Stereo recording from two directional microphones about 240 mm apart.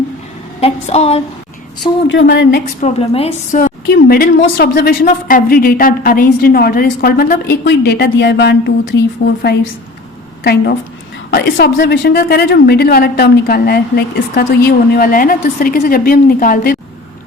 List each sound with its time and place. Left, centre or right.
0.6 s a woman's voice: left
2.0 s speech: left
2.8 s a woman's voice: left
3.9 s a woman's voice: left
10.4 s a woman's voice: left